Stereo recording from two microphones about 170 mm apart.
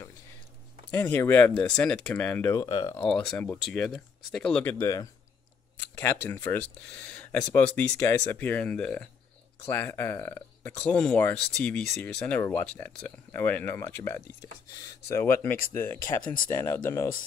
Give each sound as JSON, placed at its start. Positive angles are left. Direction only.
{"t": 0.9, "sound": "speech", "side_deg": 15}
{"t": 3.0, "sound": "speech", "side_deg": 5}
{"t": 4.7, "sound": "speech", "side_deg": 20}